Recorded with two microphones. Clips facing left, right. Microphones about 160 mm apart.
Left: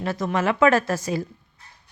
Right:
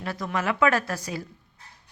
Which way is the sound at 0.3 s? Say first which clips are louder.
Left 4 dB; 25° left (ahead or behind).